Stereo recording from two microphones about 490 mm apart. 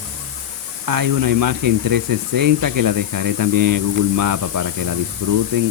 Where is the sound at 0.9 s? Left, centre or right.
Right.